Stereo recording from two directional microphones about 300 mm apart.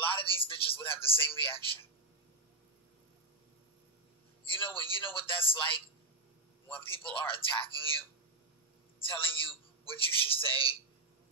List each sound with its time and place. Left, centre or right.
0.2 s speech: centre
4.5 s a man's voice: centre
6.7 s a man's voice: centre
9.0 s a man's voice: centre